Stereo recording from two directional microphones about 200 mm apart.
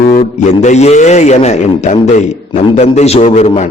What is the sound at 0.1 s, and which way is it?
A man's voice, 35° left (ahead or behind).